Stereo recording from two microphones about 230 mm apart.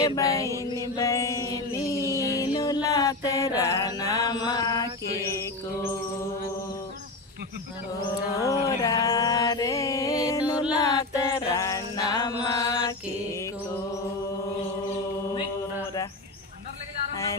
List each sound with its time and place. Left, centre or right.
0.2 s mantra: centre
0.9 s music: centre
8.4 s music: centre
12.4 s mantra: centre